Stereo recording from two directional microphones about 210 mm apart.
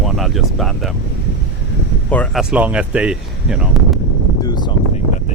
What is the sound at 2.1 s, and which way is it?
Speech, 5° left (ahead or behind).